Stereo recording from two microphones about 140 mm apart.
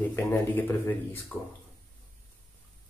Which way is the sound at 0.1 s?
20° left (ahead or behind).